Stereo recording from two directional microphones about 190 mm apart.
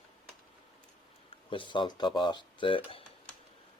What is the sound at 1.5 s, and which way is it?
Speech, 25° left (ahead or behind).